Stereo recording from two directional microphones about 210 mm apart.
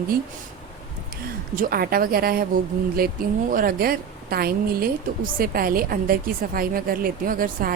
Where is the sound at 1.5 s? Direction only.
45° right (ahead or behind).